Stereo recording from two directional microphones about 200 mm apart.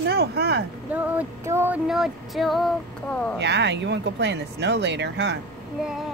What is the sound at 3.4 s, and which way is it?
Speech, 60° right (ahead or behind).